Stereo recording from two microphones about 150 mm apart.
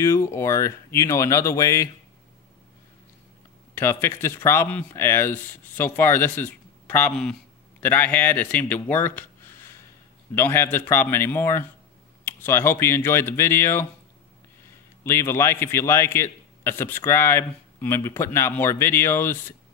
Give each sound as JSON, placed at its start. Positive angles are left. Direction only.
{"t": 0.0, "sound": "speech", "side_deg": 15}
{"t": 3.7, "sound": "a man's voice", "side_deg": 15}
{"t": 15.0, "sound": "a man's voice", "side_deg": 15}